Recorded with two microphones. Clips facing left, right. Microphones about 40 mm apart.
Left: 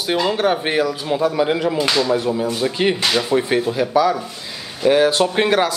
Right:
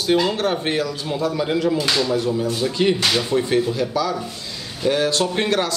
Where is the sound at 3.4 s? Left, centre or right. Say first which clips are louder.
Left 1 dB; centre.